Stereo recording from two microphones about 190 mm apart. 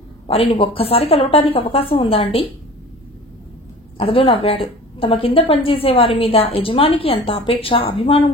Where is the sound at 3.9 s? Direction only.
30° left (ahead or behind).